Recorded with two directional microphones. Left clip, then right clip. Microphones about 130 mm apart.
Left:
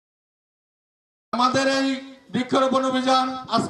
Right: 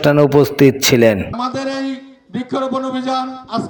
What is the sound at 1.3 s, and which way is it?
A man's voice, 10° right (ahead or behind).